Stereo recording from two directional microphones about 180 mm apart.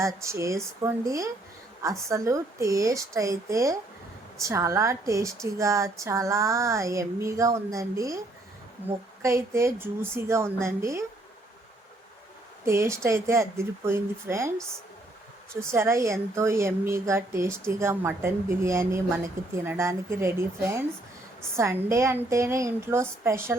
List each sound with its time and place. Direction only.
0.0 s a woman's voice: 15° right (ahead or behind)
9.2 s a woman's voice: 15° right (ahead or behind)
12.6 s a woman's voice: 15° right (ahead or behind)
15.7 s a woman's voice: 15° right (ahead or behind)